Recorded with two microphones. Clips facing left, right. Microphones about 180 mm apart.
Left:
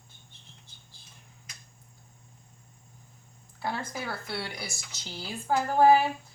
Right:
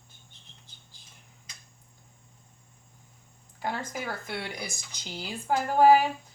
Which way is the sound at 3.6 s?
15° right (ahead or behind).